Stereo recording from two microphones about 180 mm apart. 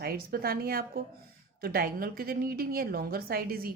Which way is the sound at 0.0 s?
55° right (ahead or behind).